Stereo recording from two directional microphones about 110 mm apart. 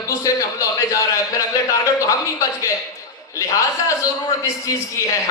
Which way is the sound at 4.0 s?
30° left (ahead or behind).